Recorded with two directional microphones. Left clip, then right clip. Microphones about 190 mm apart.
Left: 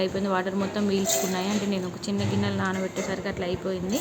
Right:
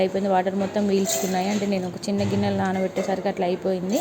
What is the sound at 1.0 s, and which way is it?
Music, centre (ahead or behind).